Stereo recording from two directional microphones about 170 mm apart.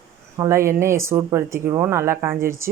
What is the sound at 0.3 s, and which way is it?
Speech, 15° right (ahead or behind).